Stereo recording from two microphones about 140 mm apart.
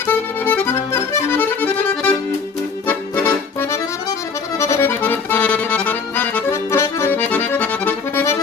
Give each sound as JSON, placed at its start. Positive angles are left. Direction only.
{"t": 0.1, "sound": "accordion", "side_deg": 15}